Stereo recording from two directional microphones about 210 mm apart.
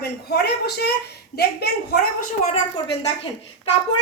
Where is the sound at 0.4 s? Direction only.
50° left (ahead or behind).